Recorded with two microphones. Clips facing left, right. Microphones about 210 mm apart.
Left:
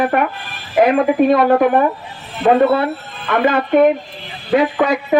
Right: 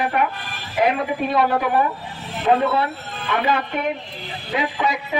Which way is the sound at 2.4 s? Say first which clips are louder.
Left 5 dB; 65° left (ahead or behind).